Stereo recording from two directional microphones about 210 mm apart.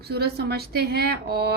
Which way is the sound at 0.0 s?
50° right (ahead or behind).